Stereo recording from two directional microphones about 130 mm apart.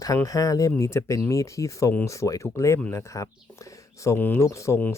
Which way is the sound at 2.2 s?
25° left (ahead or behind).